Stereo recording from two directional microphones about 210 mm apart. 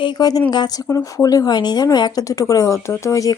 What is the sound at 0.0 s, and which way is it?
A woman's voice, 20° left (ahead or behind).